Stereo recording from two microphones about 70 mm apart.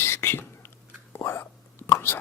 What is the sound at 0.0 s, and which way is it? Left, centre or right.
Whispering, left.